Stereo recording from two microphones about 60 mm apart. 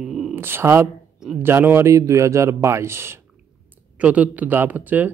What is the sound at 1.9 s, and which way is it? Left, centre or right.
Speech, right.